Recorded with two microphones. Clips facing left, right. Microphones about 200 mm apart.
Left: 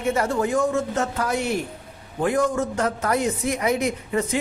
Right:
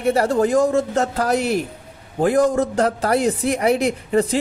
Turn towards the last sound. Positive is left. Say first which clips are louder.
# right 5 dB
turn(degrees=-35)  # may be behind; listen again after turning